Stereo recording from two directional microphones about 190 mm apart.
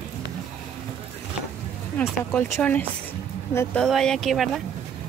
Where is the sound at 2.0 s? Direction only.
10° left (ahead or behind).